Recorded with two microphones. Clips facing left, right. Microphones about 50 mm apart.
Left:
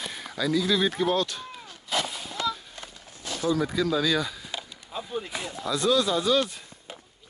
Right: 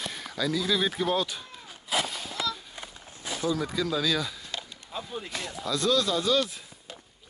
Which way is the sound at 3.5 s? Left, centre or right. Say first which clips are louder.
Left 4 dB; centre.